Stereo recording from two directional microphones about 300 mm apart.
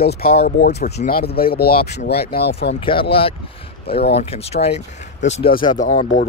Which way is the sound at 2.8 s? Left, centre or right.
Centre.